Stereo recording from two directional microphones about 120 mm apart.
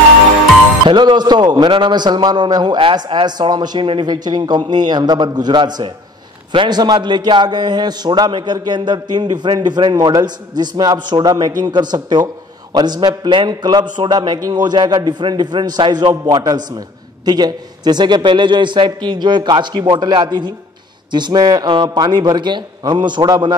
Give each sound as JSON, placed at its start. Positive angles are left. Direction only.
{"t": 0.8, "sound": "a man's voice", "side_deg": -40}